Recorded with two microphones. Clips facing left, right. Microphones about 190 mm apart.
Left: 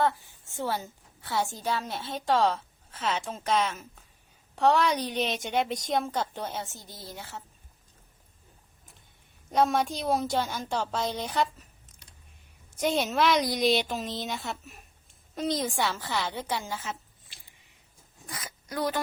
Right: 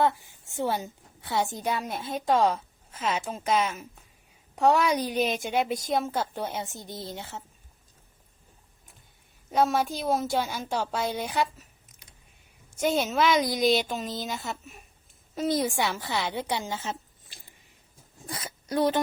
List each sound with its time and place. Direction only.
0.0 s a woman's voice: 15° right (ahead or behind)
9.5 s a woman's voice: centre (ahead or behind); by 17.0 s 25° right (ahead or behind)
18.3 s speech: 30° right (ahead or behind)